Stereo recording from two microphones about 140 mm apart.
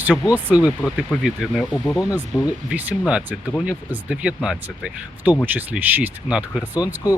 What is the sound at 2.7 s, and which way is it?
Speech, 10° right (ahead or behind).